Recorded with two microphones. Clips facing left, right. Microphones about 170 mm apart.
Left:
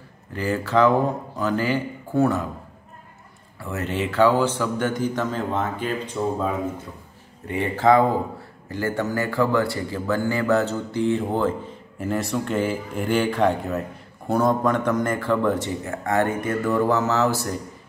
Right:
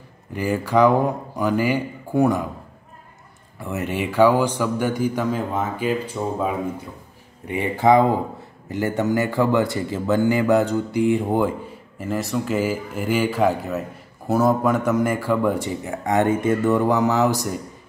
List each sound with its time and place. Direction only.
0.3 s speech: 15° right (ahead or behind)
3.5 s speech: 15° right (ahead or behind)
7.4 s speech: 15° right (ahead or behind)
12.0 s speech: centre (ahead or behind); by 17.6 s 15° right (ahead or behind)